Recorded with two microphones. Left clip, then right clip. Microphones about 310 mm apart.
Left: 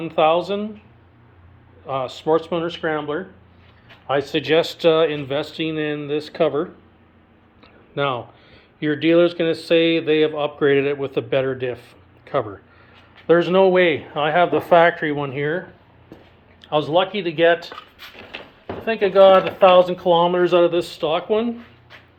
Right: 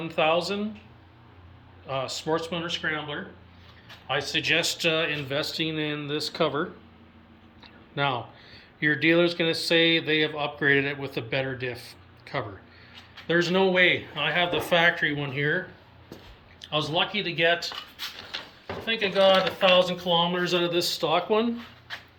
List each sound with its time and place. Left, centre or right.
0.0 s speech: centre
2.1 s speech: centre
11.7 s a sound: left
13.2 s speech: centre
16.6 s speech: centre
18.9 s speech: centre
19.7 s speech: left
20.1 s speech: centre
20.7 s speech: left
21.0 s speech: centre